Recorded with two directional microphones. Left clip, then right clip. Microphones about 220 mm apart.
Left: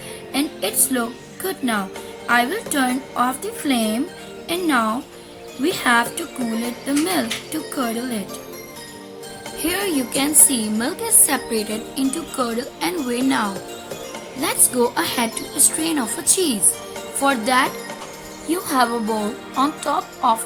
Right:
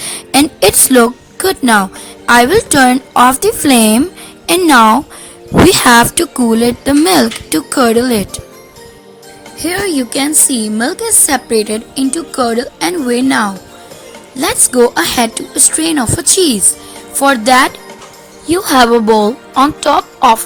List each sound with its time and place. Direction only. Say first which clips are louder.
0.3 s speech: right 14 dB; 45° right (ahead or behind)
9.6 s a woman's voice: right 7 dB; 20° right (ahead or behind)